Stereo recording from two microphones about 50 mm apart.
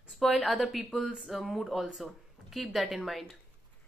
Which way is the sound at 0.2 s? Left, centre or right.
Centre.